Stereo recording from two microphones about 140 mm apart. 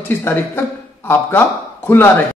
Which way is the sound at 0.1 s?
15° left (ahead or behind).